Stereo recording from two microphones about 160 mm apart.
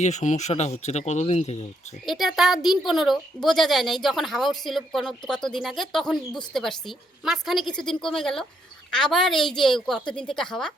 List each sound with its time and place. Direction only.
0.0 s speech: 45° left (ahead or behind)
2.0 s speech: centre (ahead or behind)